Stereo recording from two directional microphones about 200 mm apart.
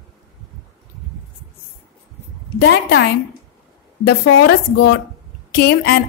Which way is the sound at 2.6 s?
60° left (ahead or behind).